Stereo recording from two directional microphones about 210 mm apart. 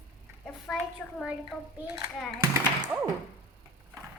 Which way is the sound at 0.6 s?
Centre (ahead or behind).